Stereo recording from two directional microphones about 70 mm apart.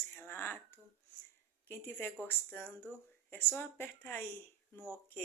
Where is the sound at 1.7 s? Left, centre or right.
Left.